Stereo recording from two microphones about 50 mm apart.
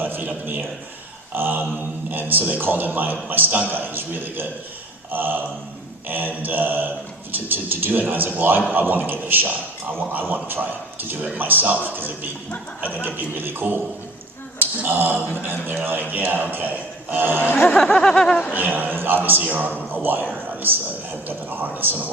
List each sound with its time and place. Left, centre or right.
0.0 s a sound: right
2.0 s a man's voice: right
14.8 s a man's voice: right
17.4 s speech: left
17.8 s speech: centre
18.3 s speech: left
18.5 s a man's voice: right
20.5 s a sound: right
21.2 s a man's voice: right